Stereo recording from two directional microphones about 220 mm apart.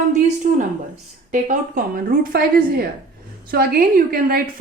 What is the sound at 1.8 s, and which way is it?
A woman's voice, 40° right (ahead or behind).